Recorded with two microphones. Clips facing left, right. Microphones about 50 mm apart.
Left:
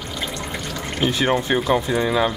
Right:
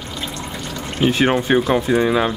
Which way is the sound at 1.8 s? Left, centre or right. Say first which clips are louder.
Right 3 dB; centre.